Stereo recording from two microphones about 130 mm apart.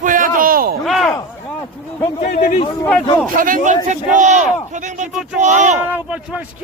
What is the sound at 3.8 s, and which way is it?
Speech, 65° right (ahead or behind).